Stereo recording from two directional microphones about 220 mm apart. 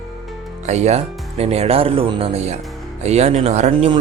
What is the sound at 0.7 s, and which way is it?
Speech, 30° right (ahead or behind).